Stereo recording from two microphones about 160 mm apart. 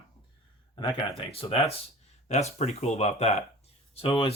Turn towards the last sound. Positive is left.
turn(degrees=35)  # may be behind; listen again after turning